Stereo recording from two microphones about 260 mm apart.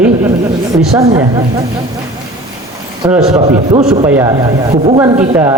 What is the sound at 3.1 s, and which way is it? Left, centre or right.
Speech, centre.